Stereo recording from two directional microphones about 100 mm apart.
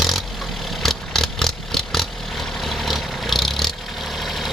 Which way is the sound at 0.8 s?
5° left (ahead or behind).